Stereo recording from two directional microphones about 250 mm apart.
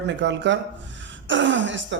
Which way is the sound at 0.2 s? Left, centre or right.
Right.